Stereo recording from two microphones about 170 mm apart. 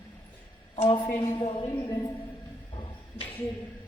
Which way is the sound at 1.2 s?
30° left (ahead or behind).